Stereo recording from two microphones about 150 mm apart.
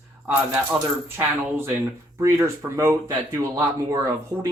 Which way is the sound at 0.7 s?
5° right (ahead or behind).